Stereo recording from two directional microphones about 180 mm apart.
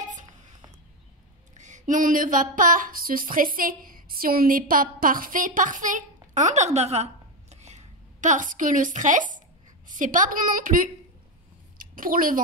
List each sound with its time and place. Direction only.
1.6 s a woman's voice: 45° right (ahead or behind)